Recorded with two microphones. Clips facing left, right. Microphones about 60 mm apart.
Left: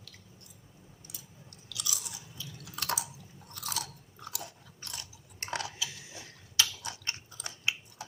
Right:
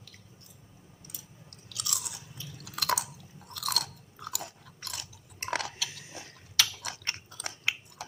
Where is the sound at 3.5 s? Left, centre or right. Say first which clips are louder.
Right 4 dB; right.